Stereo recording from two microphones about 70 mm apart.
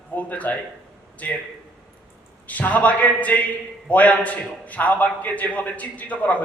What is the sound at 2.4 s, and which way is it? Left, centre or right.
A man's voice, left.